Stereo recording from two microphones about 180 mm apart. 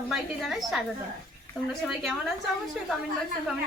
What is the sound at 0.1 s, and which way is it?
Speech, centre (ahead or behind).